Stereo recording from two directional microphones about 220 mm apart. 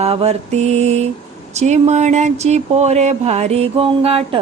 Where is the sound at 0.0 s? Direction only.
25° right (ahead or behind).